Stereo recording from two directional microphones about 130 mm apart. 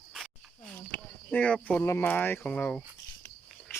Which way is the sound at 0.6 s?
10° left (ahead or behind).